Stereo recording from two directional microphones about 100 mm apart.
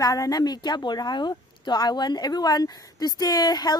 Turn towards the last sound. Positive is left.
turn(degrees=40)  # may be behind; listen again after turning